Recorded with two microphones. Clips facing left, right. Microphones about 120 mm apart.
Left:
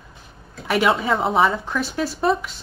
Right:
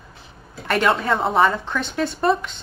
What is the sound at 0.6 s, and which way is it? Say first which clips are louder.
Speech: even; 5° left (ahead or behind).